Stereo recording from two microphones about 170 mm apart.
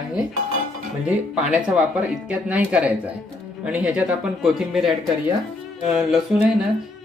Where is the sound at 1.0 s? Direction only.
5° right (ahead or behind).